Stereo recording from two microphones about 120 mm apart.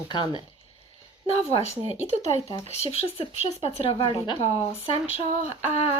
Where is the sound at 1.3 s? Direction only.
55° left (ahead or behind).